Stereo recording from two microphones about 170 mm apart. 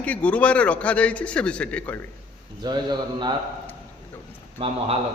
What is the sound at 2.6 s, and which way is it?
Speech, 25° right (ahead or behind).